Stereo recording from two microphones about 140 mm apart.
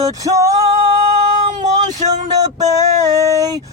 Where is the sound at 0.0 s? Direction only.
25° right (ahead or behind).